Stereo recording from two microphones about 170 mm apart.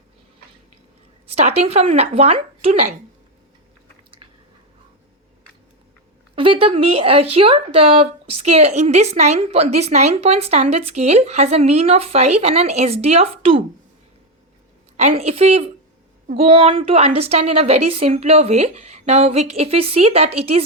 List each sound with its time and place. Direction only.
1.3 s speech: 40° right (ahead or behind)
6.3 s speech: 30° right (ahead or behind)
14.9 s speech: 40° right (ahead or behind)